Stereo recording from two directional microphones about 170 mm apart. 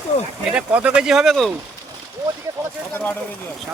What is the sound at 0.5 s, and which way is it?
Speech, 5° right (ahead or behind).